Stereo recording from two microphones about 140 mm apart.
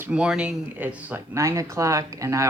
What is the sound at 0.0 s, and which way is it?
Speech, 10° right (ahead or behind).